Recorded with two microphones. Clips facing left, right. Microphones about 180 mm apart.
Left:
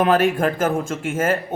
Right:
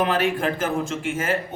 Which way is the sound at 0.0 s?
50° left (ahead or behind).